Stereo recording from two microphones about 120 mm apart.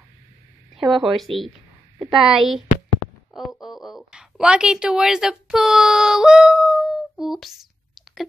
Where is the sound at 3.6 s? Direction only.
Centre (ahead or behind).